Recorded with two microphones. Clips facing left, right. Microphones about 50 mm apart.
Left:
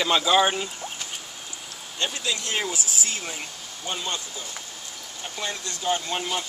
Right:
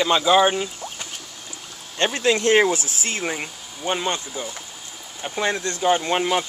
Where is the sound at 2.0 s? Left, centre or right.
Right.